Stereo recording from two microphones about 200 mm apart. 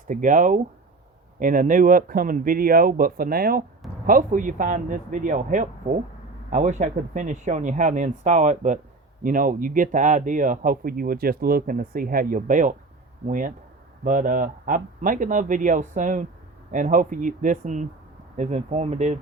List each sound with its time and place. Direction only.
0.1 s speech: 40° right (ahead or behind)